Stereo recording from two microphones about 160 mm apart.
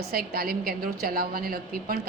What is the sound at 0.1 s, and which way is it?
A woman's voice, 70° right (ahead or behind).